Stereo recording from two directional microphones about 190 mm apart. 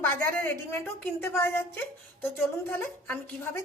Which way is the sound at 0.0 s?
10° left (ahead or behind).